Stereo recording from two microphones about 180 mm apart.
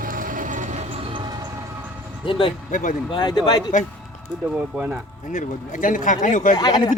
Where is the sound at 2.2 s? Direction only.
30° left (ahead or behind).